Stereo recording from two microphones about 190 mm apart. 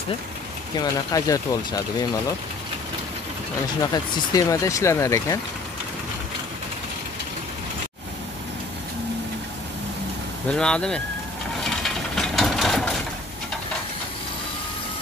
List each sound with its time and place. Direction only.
0.7 s speech: 20° left (ahead or behind)
3.9 s speech: 20° left (ahead or behind)
10.5 s speech: 5° left (ahead or behind)
11.6 s mechanisms: centre (ahead or behind)